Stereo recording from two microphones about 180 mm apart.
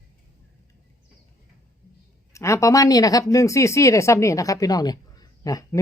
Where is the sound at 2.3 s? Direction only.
15° left (ahead or behind).